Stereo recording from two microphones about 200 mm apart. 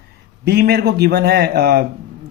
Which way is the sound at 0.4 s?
55° right (ahead or behind).